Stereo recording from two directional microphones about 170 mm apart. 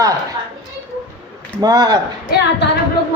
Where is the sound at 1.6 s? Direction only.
20° right (ahead or behind).